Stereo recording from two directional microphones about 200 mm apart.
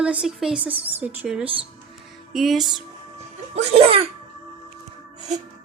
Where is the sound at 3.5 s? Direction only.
30° right (ahead or behind).